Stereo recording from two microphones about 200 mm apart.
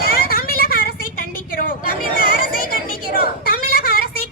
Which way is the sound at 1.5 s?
45° left (ahead or behind).